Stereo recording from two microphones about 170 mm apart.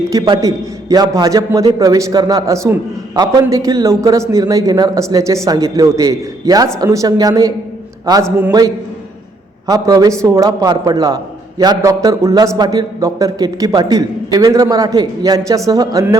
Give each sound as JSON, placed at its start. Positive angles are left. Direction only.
{"t": 0.1, "sound": "a man's voice", "side_deg": -20}
{"t": 9.6, "sound": "a man's voice", "side_deg": -20}